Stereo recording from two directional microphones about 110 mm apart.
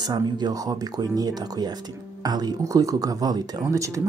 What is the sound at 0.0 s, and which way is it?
Speech, 40° right (ahead or behind).